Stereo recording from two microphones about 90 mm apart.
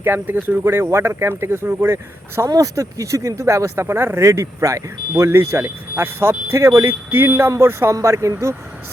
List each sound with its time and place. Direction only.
0.0 s speech: 25° right (ahead or behind)
2.5 s speech: 40° right (ahead or behind)